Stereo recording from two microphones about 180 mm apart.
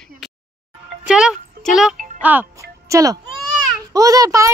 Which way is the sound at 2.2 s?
10° right (ahead or behind).